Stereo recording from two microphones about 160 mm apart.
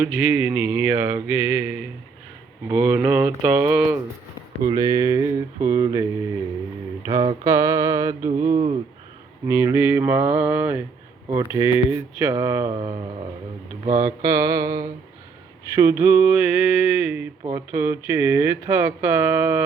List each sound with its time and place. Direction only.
0.0 s speech: 10° right (ahead or behind)
4.7 s mantra: 20° right (ahead or behind)
7.4 s mantra: 20° right (ahead or behind)
9.5 s speech: 15° right (ahead or behind)
12.7 s mantra: 25° right (ahead or behind)
15.7 s speech: 15° right (ahead or behind)